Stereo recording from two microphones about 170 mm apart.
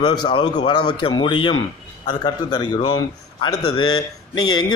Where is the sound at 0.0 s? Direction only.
30° left (ahead or behind).